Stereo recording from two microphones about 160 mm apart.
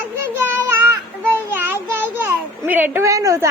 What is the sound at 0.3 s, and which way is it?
Child singing, 15° right (ahead or behind).